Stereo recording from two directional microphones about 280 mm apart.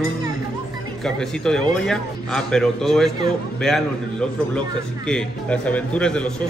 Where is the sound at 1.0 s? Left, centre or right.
Centre.